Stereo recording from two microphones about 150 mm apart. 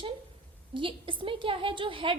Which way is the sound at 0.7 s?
35° right (ahead or behind).